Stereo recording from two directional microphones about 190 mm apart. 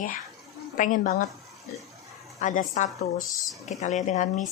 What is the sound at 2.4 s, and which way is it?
Speech, 40° left (ahead or behind).